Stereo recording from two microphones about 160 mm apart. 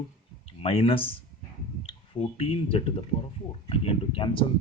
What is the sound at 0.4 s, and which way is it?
Speech, 35° left (ahead or behind).